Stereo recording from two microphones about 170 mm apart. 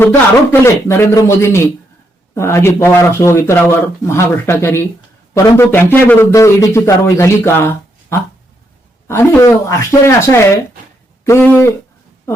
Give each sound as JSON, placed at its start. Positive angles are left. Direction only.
{"t": 0.6, "sound": "speech", "side_deg": 15}